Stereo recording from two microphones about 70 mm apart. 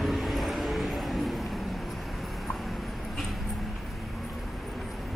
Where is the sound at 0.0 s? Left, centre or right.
Centre.